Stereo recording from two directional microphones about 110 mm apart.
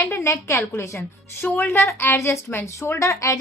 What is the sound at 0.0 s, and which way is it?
A woman's voice, 20° left (ahead or behind).